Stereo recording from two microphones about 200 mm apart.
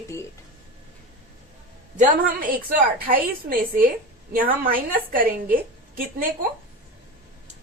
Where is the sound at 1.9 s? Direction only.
45° right (ahead or behind).